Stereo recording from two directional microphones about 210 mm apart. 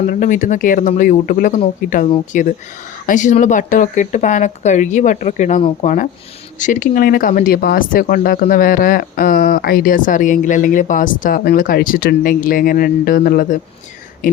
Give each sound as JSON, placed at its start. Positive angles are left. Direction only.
{"t": 0.1, "sound": "speech", "side_deg": 40}